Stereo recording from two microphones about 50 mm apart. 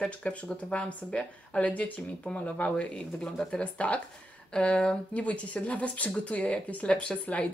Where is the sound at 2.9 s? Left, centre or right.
Centre.